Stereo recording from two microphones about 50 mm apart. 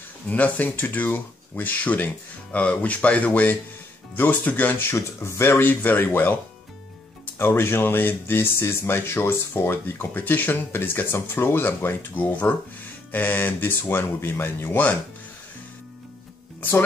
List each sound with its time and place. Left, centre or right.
0.3 s speech: left
4.9 s speech: left
5.6 s speech: left
7.3 s speech: left
12.2 s speech: left